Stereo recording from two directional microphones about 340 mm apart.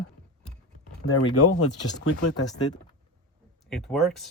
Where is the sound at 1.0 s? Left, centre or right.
Left.